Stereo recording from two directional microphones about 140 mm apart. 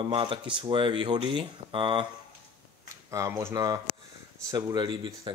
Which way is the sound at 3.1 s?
20° right (ahead or behind).